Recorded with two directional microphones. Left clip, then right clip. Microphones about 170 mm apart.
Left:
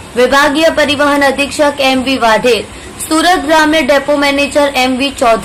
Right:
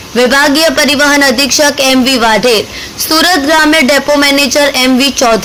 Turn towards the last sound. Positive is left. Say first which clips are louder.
# right 2 dB
turn(degrees=-30)  # may be behind; listen again after turning